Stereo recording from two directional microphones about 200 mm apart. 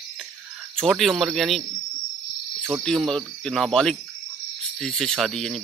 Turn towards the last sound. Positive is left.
turn(degrees=0)  # may be behind; listen again after turning